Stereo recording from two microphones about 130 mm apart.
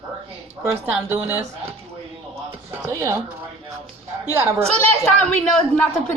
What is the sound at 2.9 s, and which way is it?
Speech, 20° right (ahead or behind).